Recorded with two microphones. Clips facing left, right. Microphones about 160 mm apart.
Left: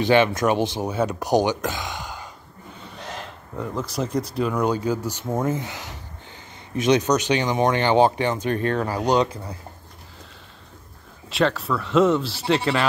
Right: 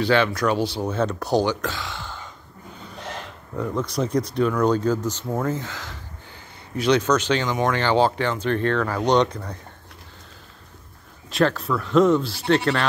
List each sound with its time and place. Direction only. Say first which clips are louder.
0.0 s speech: left 2 dB; 20° left (ahead or behind)
3.5 s speech: right 2 dB; 5° left (ahead or behind)
11.2 s speech: right 1 dB; centre (ahead or behind)